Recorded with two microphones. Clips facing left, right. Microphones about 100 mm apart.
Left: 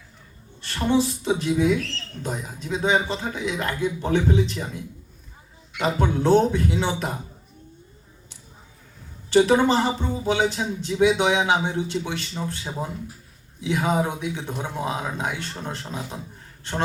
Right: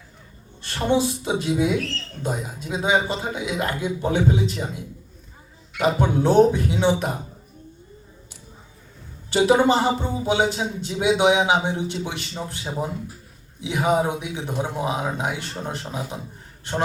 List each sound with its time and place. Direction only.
0.6 s a man's voice: 20° right (ahead or behind); by 4.4 s 5° right (ahead or behind)
5.8 s speech: 5° right (ahead or behind)
9.3 s a man's voice: 15° right (ahead or behind)
10.0 s speech: 25° right (ahead or behind)
10.6 s a man's voice: 15° right (ahead or behind)